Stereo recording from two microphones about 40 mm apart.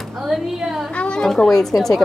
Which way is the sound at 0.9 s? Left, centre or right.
Left.